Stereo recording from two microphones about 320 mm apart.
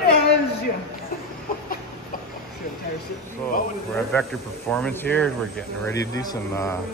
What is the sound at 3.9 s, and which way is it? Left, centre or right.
Speech, centre.